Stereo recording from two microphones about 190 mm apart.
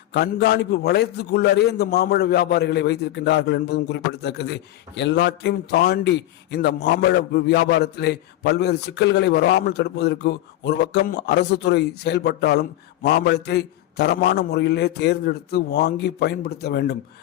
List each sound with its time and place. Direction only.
0.1 s a man's voice: 60° left (ahead or behind)